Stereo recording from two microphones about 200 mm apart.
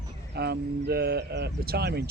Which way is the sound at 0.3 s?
55° right (ahead or behind).